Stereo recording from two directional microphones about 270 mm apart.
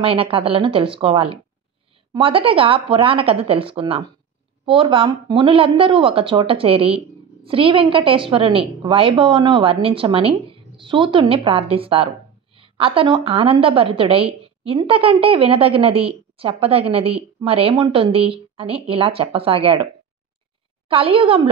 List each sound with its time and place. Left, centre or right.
0.0 s a woman's voice: centre
20.9 s a woman's voice: centre